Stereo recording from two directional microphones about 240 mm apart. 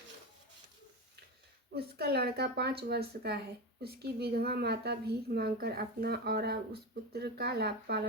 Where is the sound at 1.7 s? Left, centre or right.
Right.